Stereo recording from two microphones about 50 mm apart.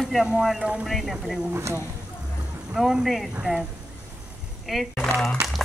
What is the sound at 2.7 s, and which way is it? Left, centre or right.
Speech, centre.